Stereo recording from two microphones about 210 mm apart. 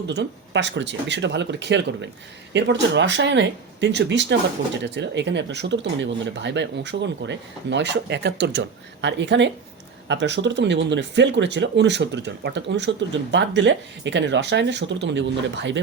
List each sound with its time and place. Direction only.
0.1 s speech: 55° right (ahead or behind)